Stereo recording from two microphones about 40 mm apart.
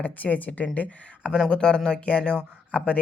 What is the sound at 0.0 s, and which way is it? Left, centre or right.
Speech, left.